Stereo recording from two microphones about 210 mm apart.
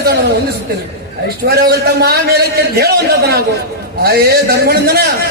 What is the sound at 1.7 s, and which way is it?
A man's voice, 50° right (ahead or behind).